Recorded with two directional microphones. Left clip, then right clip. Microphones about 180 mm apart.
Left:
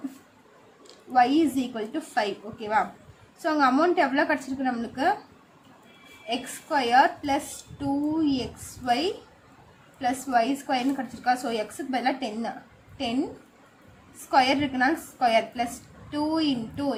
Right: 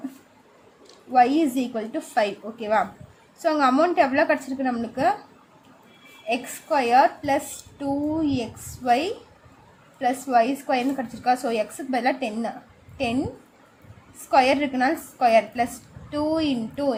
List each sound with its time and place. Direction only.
1.1 s a woman's voice: 30° right (ahead or behind)
6.2 s a woman's voice: 30° right (ahead or behind)
14.3 s a woman's voice: 30° right (ahead or behind)